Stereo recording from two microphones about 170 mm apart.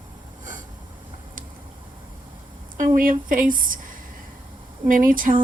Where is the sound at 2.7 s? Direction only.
55° right (ahead or behind).